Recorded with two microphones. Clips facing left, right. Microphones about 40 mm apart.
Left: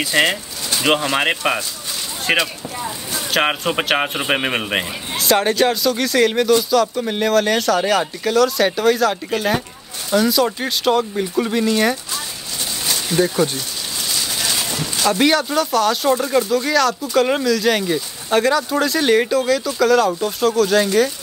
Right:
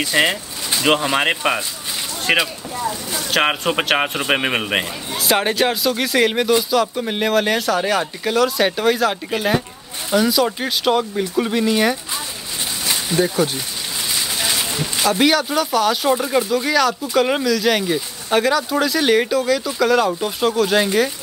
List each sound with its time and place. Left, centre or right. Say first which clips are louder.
0.0 s speech: even; centre
13.1 s speech: left 1 dB; centre
14.4 s a sound: right 1 dB; centre
15.0 s speech: even; centre